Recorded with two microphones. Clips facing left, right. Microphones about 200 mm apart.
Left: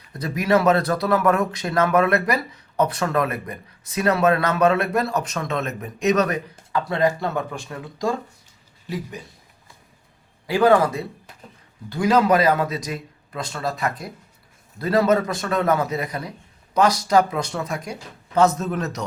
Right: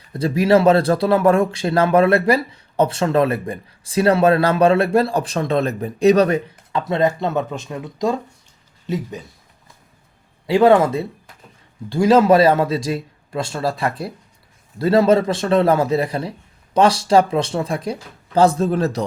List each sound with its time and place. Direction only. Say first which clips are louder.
0.1 s speech: right 5 dB; 30° right (ahead or behind)
10.4 s speech: right 4 dB; 25° right (ahead or behind)